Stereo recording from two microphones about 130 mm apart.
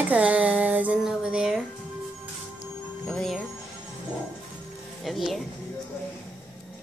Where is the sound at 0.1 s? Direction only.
10° right (ahead or behind).